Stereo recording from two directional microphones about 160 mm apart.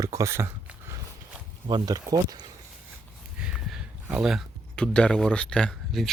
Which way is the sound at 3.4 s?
5° right (ahead or behind).